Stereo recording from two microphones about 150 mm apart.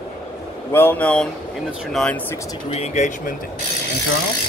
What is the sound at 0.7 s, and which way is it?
Speech, 15° left (ahead or behind).